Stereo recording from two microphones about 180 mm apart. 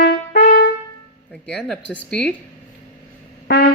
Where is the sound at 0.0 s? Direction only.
60° left (ahead or behind).